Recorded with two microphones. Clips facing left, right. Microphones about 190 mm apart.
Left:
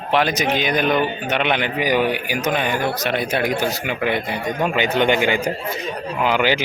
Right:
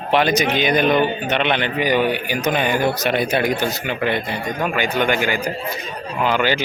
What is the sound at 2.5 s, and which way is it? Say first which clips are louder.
Speech: right 4 dB; centre (ahead or behind).